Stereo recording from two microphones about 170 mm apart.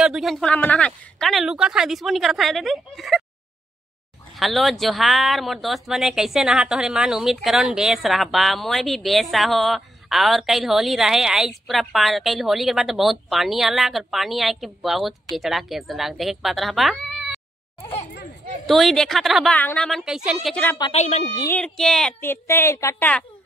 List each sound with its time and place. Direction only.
0.0 s speech: centre (ahead or behind)
4.4 s speech: centre (ahead or behind)
18.7 s speech: centre (ahead or behind)
20.9 s a woman's voice: 40° left (ahead or behind)
21.5 s speech: 5° left (ahead or behind)
22.3 s a woman's voice: 15° left (ahead or behind)